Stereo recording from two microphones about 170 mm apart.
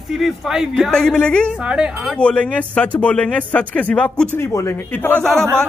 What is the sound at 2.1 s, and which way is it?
Speech, 5° left (ahead or behind).